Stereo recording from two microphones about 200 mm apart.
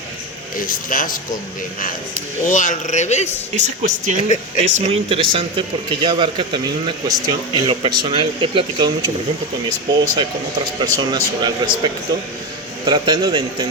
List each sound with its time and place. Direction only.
0.5 s speech: 45° left (ahead or behind)
2.5 s speech: 40° left (ahead or behind)
3.5 s a man's voice: 40° right (ahead or behind)
10.8 s a man's voice: 20° right (ahead or behind)